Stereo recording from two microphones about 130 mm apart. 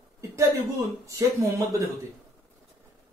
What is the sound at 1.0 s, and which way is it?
Speech, 20° right (ahead or behind).